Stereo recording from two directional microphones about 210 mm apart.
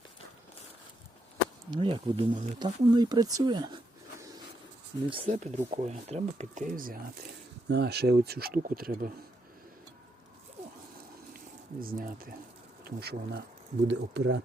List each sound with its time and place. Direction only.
1.7 s speech: 25° right (ahead or behind)
5.0 s speech: 25° right (ahead or behind); by 9.1 s 40° right (ahead or behind)
11.3 s speech: 45° right (ahead or behind)